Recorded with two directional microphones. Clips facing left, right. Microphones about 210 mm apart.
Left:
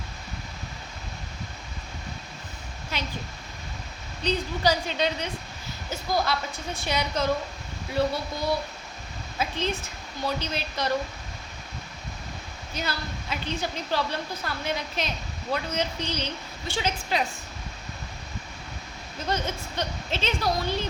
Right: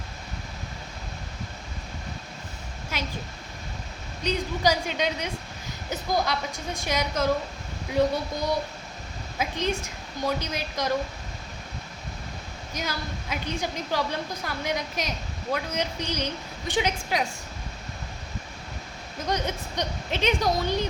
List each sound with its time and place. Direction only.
2.9 s a sound: 10° right (ahead or behind)
4.2 s a woman's voice: 10° right (ahead or behind)
12.7 s a woman's voice: 10° right (ahead or behind)
19.3 s a woman's voice: 15° right (ahead or behind)